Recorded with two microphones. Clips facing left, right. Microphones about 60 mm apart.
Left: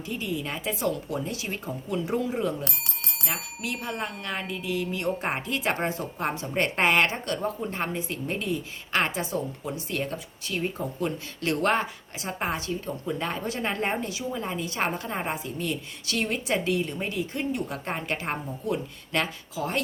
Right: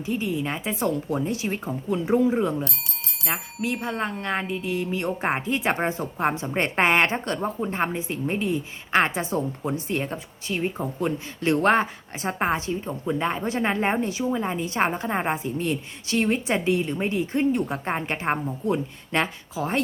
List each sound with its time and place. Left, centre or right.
0.0 s a woman's voice: right